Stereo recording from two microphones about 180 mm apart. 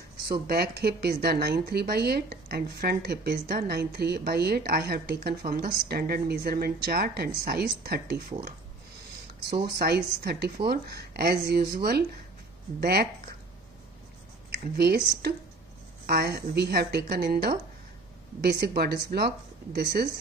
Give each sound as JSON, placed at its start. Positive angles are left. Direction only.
{"t": 0.3, "sound": "a woman's voice", "side_deg": -60}
{"t": 9.8, "sound": "a woman's voice", "side_deg": -60}
{"t": 14.5, "sound": "a woman's voice", "side_deg": -60}